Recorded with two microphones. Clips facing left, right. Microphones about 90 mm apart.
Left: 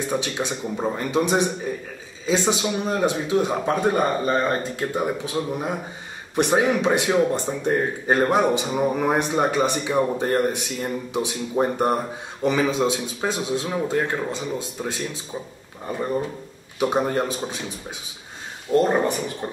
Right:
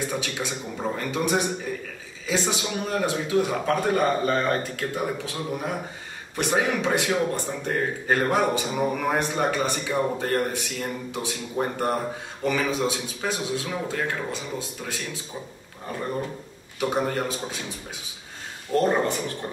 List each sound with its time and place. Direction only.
0.1 s a man's voice: 20° left (ahead or behind)
16.8 s a man's voice: 20° left (ahead or behind)
18.7 s a man's voice: 25° left (ahead or behind)